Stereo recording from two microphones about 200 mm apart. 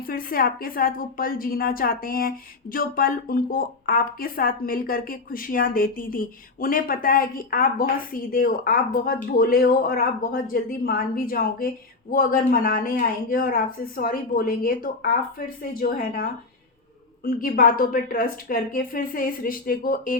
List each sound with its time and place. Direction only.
0.0 s a woman's voice: 45° left (ahead or behind)
17.2 s a woman's voice: 45° left (ahead or behind)